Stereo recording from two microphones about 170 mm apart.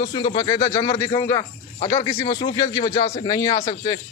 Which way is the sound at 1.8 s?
40° left (ahead or behind).